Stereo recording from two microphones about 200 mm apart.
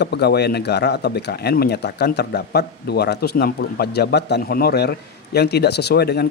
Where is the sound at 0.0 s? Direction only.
55° left (ahead or behind).